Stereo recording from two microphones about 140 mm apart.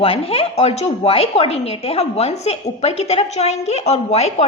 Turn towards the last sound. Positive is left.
turn(degrees=50)  # may be behind; listen again after turning